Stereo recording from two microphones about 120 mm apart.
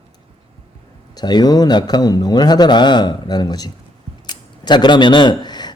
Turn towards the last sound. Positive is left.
turn(degrees=35)  # may be behind; listen again after turning